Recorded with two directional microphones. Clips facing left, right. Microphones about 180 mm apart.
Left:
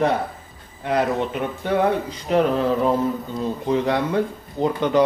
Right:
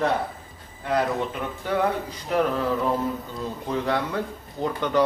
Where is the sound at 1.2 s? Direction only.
20° left (ahead or behind).